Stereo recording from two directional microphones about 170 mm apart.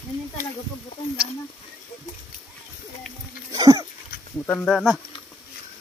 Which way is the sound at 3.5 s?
20° right (ahead or behind).